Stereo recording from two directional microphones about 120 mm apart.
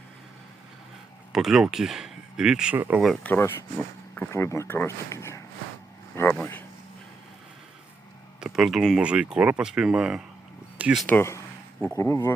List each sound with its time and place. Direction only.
1.3 s speech: 5° right (ahead or behind)
2.7 s speech: 15° right (ahead or behind)
3.2 s speech: 20° left (ahead or behind)
4.3 s speech: 25° left (ahead or behind)
8.4 s speech: 5° right (ahead or behind)
11.0 s speech: 20° left (ahead or behind)